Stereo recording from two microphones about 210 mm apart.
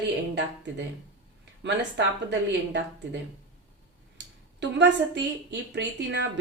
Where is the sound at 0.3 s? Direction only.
55° right (ahead or behind).